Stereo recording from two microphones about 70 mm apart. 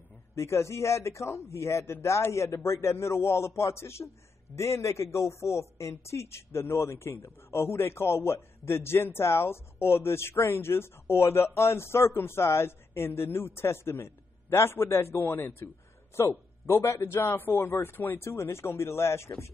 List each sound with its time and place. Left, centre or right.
0.4 s a man's voice: left